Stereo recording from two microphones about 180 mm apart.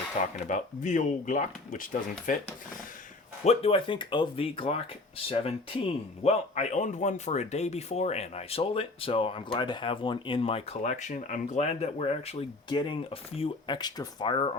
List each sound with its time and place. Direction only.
0.3 s speech: 45° left (ahead or behind)
3.4 s speech: 35° left (ahead or behind)